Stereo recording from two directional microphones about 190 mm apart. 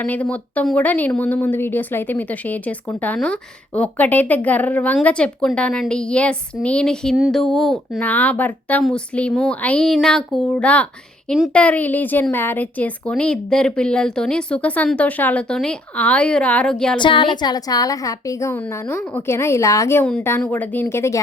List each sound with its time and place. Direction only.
0.0 s a woman's voice: 5° left (ahead or behind)
17.0 s a woman's voice: 25° left (ahead or behind)